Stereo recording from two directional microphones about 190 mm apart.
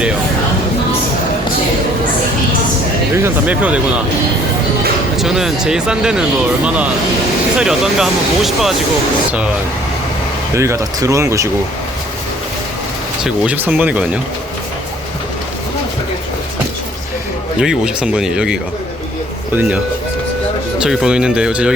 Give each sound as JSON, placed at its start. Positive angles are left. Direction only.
{"t": 3.2, "sound": "speech", "side_deg": -10}
{"t": 5.1, "sound": "speech", "side_deg": 0}
{"t": 7.6, "sound": "speech", "side_deg": -5}
{"t": 10.5, "sound": "speech", "side_deg": -15}
{"t": 13.2, "sound": "speech", "side_deg": -5}
{"t": 17.6, "sound": "speech", "side_deg": -5}
{"t": 20.8, "sound": "speech", "side_deg": -5}